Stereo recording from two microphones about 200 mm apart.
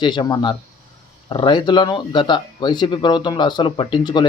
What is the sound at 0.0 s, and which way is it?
A man's voice, 20° left (ahead or behind).